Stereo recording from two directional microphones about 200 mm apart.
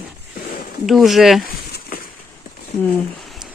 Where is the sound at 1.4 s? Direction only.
50° left (ahead or behind).